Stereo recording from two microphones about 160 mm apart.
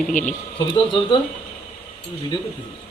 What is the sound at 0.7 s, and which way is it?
Speech, 30° left (ahead or behind).